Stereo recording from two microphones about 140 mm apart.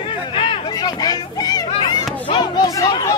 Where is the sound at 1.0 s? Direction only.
25° left (ahead or behind).